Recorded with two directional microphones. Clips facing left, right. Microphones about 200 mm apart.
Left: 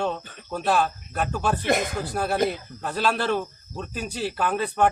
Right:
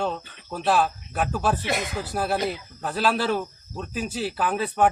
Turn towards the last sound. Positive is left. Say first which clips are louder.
# even
turn(degrees=-5)  # may be behind; listen again after turning